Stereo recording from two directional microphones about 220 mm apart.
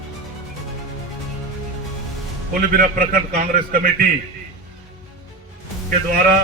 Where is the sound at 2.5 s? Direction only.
40° right (ahead or behind).